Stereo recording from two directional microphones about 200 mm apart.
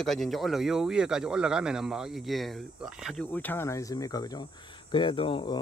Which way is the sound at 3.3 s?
10° left (ahead or behind).